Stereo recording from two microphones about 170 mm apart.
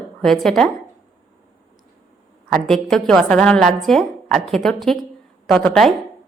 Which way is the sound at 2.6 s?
5° left (ahead or behind).